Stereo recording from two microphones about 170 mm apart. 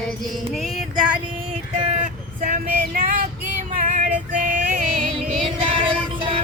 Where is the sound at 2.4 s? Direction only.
50° right (ahead or behind).